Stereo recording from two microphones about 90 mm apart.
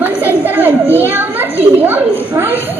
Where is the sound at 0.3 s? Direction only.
20° right (ahead or behind).